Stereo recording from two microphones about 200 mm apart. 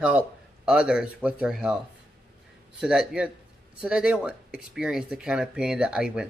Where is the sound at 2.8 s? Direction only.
5° right (ahead or behind).